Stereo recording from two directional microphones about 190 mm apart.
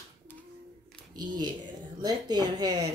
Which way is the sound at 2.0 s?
20° right (ahead or behind).